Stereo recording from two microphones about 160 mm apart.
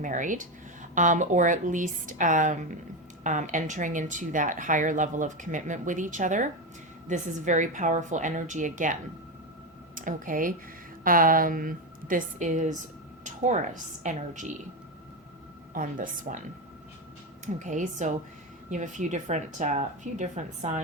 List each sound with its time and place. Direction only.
0.0 s a woman's voice: 50° right (ahead or behind)
15.7 s a woman's voice: 55° right (ahead or behind)
17.4 s a woman's voice: 50° right (ahead or behind)